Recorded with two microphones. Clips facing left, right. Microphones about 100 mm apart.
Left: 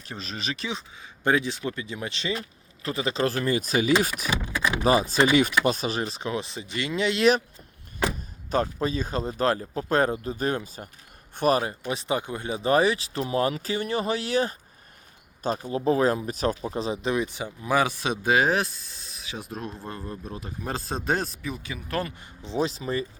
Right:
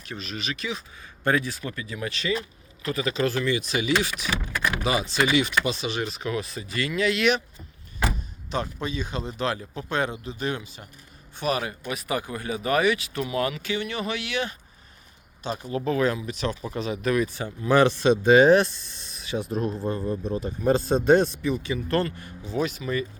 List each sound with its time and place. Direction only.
0.0 s speech: 30° left (ahead or behind)
1.2 s speech: 20° left (ahead or behind)
8.4 s speech: 40° left (ahead or behind)
16.6 s speech: 30° left (ahead or behind); by 22.0 s 5° left (ahead or behind)
22.0 s speech: 20° left (ahead or behind)